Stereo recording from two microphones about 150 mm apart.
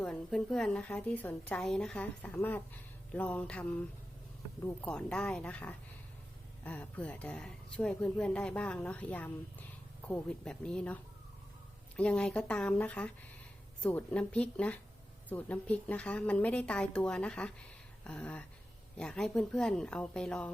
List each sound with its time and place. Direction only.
0.0 s a woman's voice: 5° left (ahead or behind)
11.9 s speech: 5° left (ahead or behind)
18.0 s a sound: 5° left (ahead or behind)
18.9 s a woman's voice: 5° left (ahead or behind)